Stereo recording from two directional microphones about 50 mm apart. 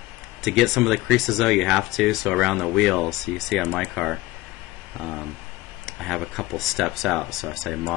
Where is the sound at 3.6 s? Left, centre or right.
Centre.